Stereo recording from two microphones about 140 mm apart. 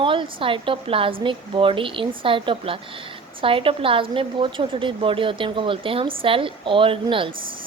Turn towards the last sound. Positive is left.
turn(degrees=-40)  # may be behind; listen again after turning